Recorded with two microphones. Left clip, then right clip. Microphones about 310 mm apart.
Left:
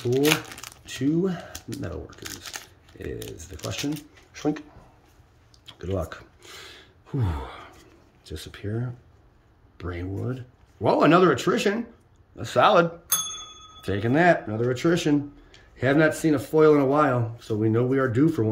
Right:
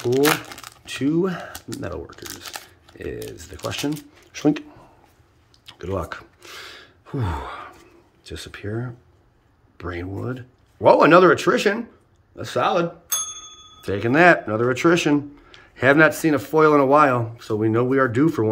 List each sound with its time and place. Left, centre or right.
0.5 s speech: centre
4.3 s speech: right
5.7 s gasp: centre
8.3 s speech: centre
13.0 s bicycle bell: left
13.7 s speech: centre